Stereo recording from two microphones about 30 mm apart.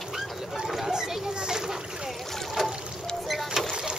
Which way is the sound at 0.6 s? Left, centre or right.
Centre.